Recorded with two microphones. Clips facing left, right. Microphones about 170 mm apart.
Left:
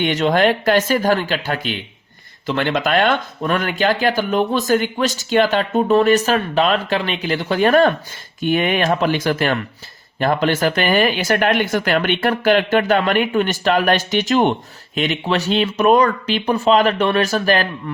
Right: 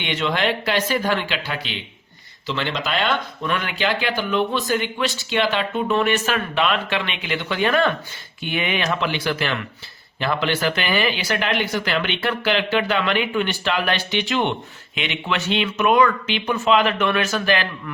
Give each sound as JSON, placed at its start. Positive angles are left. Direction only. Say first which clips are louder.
{"t": 0.0, "sound": "speech", "louder": "left 7 dB", "side_deg": 45}